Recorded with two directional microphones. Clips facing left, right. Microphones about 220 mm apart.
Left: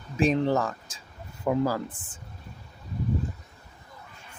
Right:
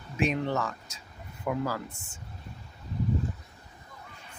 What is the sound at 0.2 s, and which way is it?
Speech, 35° left (ahead or behind).